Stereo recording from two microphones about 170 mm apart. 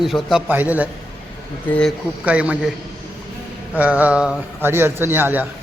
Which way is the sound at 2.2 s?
5° right (ahead or behind).